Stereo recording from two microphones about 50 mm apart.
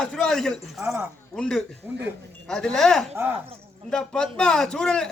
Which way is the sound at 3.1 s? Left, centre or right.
Right.